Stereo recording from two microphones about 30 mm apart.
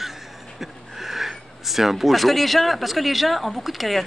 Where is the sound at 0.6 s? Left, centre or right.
Centre.